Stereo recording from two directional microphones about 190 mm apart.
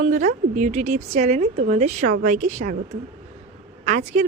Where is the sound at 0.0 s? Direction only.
45° right (ahead or behind).